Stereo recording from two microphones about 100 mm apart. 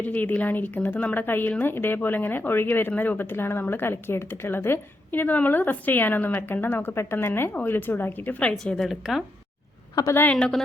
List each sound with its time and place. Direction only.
0.0 s a woman's voice: 15° left (ahead or behind); by 9.2 s centre (ahead or behind)
9.9 s a woman's voice: 35° left (ahead or behind)
10.3 s speech: 5° left (ahead or behind)